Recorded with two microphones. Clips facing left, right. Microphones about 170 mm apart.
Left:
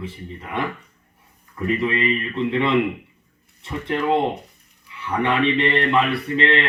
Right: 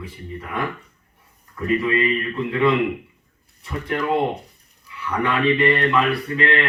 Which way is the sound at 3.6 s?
25° left (ahead or behind).